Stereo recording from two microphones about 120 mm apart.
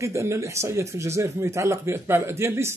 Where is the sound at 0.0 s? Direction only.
25° right (ahead or behind).